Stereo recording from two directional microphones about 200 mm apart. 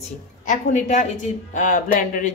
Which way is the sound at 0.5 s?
35° left (ahead or behind).